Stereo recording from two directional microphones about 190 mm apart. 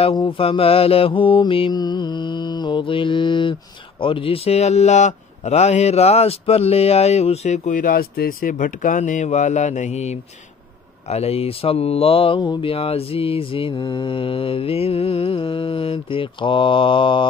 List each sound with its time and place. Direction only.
0.0 s mantra: 25° left (ahead or behind)
4.0 s a man's voice: 30° left (ahead or behind)
11.1 s mantra: 35° left (ahead or behind)